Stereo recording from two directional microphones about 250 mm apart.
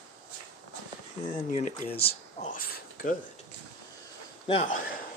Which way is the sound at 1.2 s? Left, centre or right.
Left.